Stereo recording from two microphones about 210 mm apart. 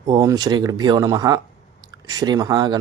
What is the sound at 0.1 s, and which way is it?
Speech, 15° right (ahead or behind).